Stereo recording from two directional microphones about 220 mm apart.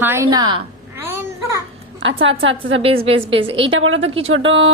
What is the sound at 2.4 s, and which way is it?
Speech, 60° right (ahead or behind).